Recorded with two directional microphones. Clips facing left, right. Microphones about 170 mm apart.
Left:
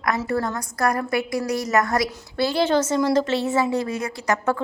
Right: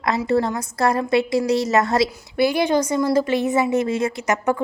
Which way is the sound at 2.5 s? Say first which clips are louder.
Left 1 dB; 15° right (ahead or behind).